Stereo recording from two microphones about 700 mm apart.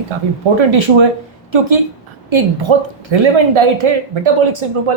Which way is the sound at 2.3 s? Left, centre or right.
Right.